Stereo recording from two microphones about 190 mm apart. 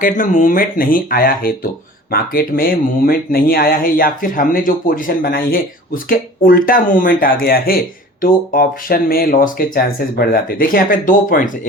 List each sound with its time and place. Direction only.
0.0 s speech: 45° left (ahead or behind)